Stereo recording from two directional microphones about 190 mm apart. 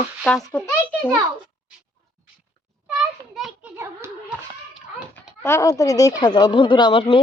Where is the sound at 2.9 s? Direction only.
Centre (ahead or behind).